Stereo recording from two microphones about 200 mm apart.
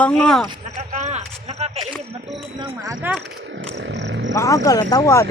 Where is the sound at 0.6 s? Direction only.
35° right (ahead or behind).